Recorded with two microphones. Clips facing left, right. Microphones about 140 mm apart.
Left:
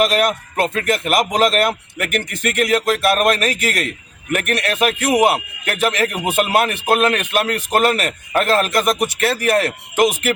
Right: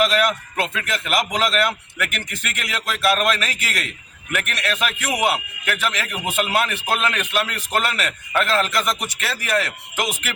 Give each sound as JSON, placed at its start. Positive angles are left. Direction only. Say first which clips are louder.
{"t": 0.0, "sound": "speech", "louder": "left 3 dB", "side_deg": 45}